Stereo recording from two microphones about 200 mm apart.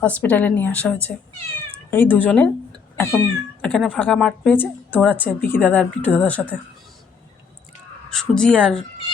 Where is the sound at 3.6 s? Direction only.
5° left (ahead or behind).